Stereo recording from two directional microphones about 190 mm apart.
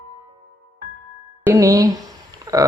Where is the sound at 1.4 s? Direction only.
15° right (ahead or behind).